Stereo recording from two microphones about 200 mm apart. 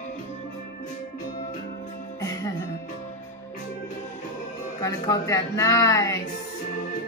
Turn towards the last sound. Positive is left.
turn(degrees=15)  # may be behind; listen again after turning